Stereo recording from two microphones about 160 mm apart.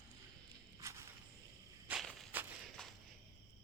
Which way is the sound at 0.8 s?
20° right (ahead or behind).